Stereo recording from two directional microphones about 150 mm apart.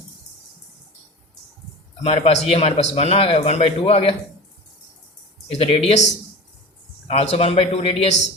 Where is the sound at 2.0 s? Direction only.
45° left (ahead or behind).